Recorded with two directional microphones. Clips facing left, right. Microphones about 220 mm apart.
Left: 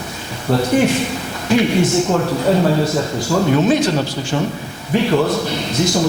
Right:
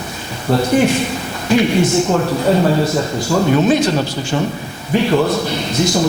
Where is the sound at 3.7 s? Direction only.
15° right (ahead or behind).